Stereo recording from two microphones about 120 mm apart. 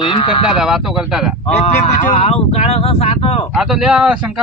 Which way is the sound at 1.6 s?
65° left (ahead or behind).